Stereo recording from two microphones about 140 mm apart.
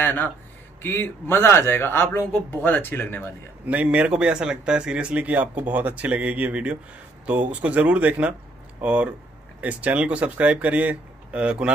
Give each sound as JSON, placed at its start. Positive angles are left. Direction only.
{"t": 0.0, "sound": "a man's voice", "side_deg": 15}
{"t": 3.6, "sound": "speech", "side_deg": -10}